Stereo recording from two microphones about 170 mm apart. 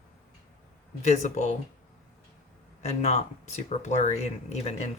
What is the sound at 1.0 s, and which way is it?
Speech, 45° left (ahead or behind).